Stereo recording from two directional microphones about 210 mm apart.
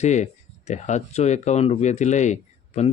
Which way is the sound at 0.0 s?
35° left (ahead or behind).